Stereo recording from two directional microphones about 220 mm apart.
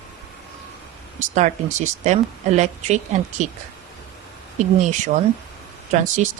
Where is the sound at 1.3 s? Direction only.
35° right (ahead or behind).